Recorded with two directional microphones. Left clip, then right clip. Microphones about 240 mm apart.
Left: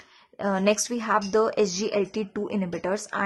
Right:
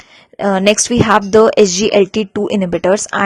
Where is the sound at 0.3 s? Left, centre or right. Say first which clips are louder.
Right 11 dB; right.